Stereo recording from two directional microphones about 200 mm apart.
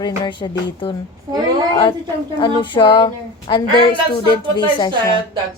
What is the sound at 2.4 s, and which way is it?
A woman's voice, 25° left (ahead or behind).